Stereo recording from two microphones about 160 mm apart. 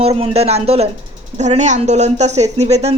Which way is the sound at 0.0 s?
40° right (ahead or behind).